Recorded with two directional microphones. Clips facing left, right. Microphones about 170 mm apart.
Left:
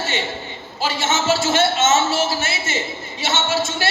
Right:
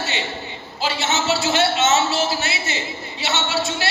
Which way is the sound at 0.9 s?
50° left (ahead or behind).